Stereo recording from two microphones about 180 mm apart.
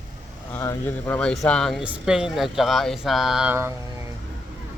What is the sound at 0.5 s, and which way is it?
Speech, 15° left (ahead or behind).